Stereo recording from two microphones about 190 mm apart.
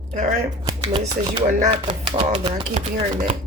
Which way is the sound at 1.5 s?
30° right (ahead or behind).